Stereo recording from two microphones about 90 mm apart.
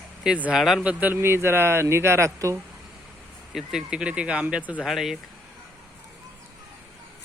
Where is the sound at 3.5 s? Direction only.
5° right (ahead or behind).